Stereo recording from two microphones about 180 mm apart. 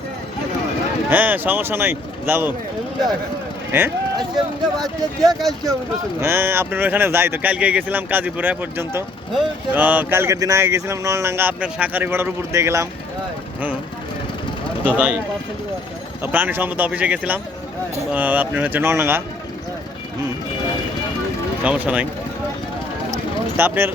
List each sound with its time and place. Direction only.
1.1 s speech: 10° right (ahead or behind)
3.7 s speech: 15° right (ahead or behind)
14.8 s speech: 5° right (ahead or behind)
16.2 s speech: 10° right (ahead or behind)
21.6 s speech: 10° right (ahead or behind)
23.6 s speech: 10° right (ahead or behind)